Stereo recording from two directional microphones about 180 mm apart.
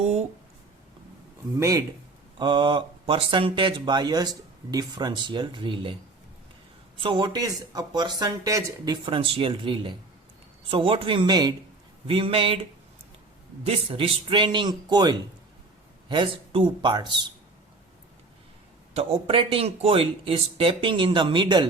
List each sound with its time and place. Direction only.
0.0 s a sound: 35° right (ahead or behind)
1.5 s speech: 15° right (ahead or behind)
2.4 s speech: 25° right (ahead or behind)
7.0 s speech: 25° right (ahead or behind)
13.7 s speech: 30° right (ahead or behind)
18.9 s speech: 30° right (ahead or behind)